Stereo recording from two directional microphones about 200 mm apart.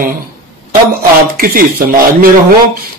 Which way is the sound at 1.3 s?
45° right (ahead or behind).